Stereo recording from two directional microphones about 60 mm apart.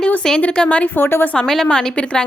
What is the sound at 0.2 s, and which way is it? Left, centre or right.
Speech, centre.